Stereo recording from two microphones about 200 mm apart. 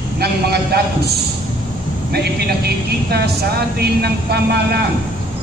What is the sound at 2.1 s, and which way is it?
Speech, 55° right (ahead or behind).